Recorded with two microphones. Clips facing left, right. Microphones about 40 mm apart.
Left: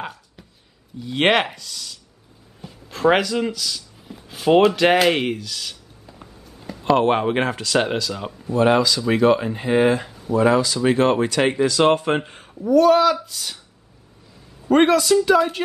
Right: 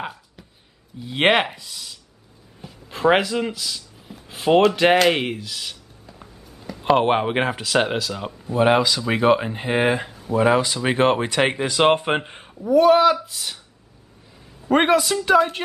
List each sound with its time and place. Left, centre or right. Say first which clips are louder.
0.0 s a sound: right 1 dB; centre
0.9 s speech: even; centre
6.0 s a sound: left 1 dB; centre
6.8 s speech: even; centre
8.5 s speech: left 1 dB; centre
14.7 s speech: left 2 dB; centre